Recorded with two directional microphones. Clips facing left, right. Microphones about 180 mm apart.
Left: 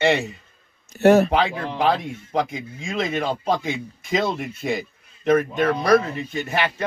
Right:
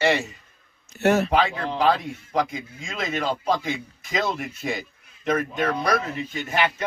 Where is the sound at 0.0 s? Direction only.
25° left (ahead or behind).